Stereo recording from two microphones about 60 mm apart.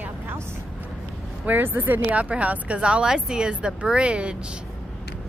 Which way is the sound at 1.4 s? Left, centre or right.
Right.